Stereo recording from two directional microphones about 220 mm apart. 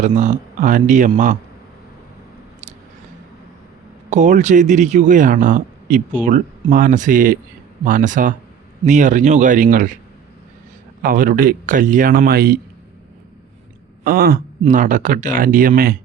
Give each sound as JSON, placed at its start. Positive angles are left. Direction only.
{"t": 0.0, "sound": "speech", "side_deg": -35}
{"t": 4.1, "sound": "speech", "side_deg": -35}
{"t": 11.0, "sound": "speech", "side_deg": -40}
{"t": 14.0, "sound": "speech", "side_deg": -40}